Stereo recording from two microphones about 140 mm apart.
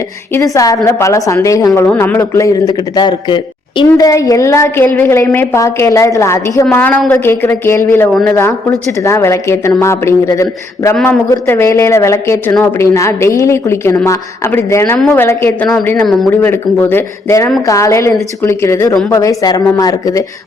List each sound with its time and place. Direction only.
0.3 s a woman's voice: 25° left (ahead or behind)